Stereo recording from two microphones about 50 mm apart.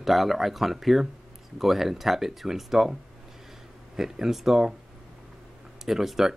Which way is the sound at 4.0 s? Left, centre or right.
Centre.